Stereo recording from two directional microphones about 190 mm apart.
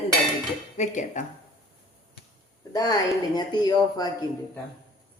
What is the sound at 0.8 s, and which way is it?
Speech, 40° left (ahead or behind).